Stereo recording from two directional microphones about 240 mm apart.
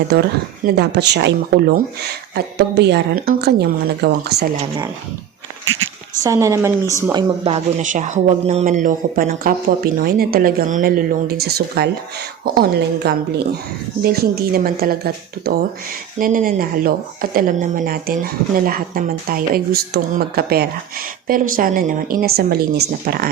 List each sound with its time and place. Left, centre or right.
0.1 s speech: right
6.2 s speech: centre; by 23.3 s right